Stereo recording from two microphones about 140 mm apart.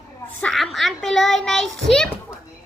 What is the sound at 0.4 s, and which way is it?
A woman's voice, centre (ahead or behind).